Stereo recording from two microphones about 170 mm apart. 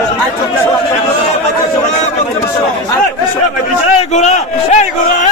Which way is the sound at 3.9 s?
45° left (ahead or behind).